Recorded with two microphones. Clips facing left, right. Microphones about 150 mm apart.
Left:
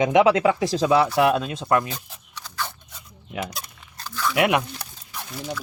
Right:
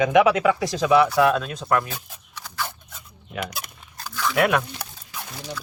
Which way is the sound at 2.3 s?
10° right (ahead or behind).